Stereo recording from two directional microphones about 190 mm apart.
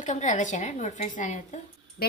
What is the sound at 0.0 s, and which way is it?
Speech, 40° left (ahead or behind).